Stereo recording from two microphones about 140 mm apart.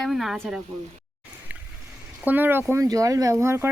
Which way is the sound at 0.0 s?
Centre (ahead or behind).